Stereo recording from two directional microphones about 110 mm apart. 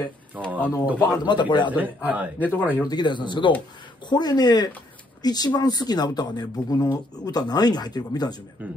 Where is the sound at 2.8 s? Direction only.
40° left (ahead or behind).